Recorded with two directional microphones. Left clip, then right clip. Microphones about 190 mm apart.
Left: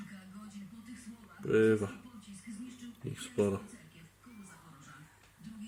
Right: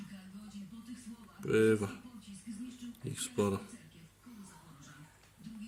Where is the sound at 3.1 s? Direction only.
15° right (ahead or behind).